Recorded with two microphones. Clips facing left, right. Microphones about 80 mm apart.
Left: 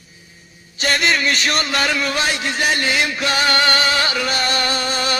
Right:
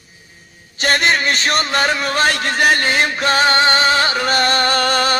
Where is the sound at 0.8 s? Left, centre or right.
Right.